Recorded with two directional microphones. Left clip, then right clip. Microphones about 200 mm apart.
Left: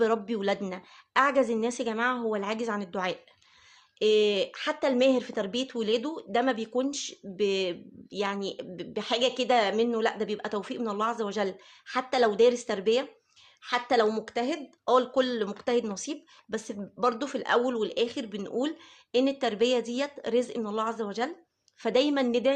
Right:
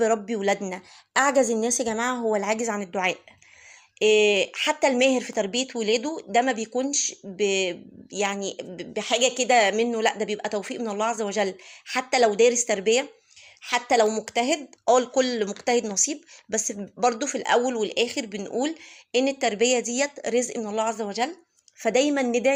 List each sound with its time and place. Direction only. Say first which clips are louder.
0.0 s speech: right 4 dB; 10° right (ahead or behind)